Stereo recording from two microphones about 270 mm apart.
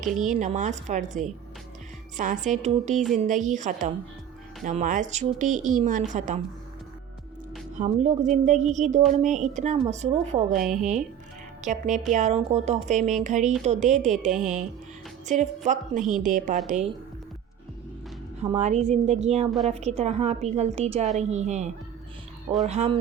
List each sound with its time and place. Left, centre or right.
0.3 s a woman's voice: right
7.8 s a woman's voice: right
18.3 s a woman's voice: right
19.5 s a woman's voice: centre
19.7 s a woman's voice: right